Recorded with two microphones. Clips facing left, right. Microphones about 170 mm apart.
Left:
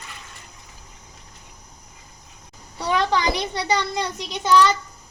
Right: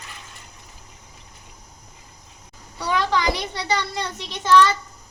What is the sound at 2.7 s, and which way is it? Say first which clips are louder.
A child's voice: left 1 dB; 25° left (ahead or behind).